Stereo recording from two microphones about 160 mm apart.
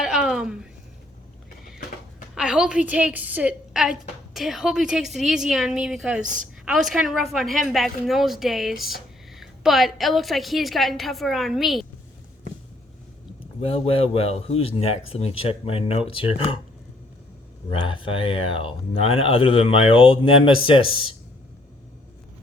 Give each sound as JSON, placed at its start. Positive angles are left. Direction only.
{"t": 0.0, "sound": "a sound", "side_deg": -5}
{"t": 2.3, "sound": "a woman's voice", "side_deg": -5}
{"t": 6.2, "sound": "a woman's voice", "side_deg": -55}
{"t": 6.7, "sound": "speech", "side_deg": 0}
{"t": 13.6, "sound": "speech", "side_deg": 40}
{"t": 17.7, "sound": "speech", "side_deg": 30}